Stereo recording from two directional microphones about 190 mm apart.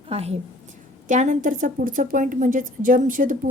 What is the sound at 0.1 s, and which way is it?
A woman's voice, 30° right (ahead or behind).